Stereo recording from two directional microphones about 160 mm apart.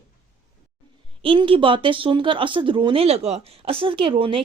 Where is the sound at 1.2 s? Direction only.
35° right (ahead or behind).